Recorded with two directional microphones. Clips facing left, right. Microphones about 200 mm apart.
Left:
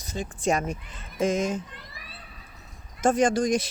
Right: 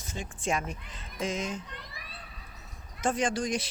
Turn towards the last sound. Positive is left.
turn(degrees=45)  # may be behind; listen again after turning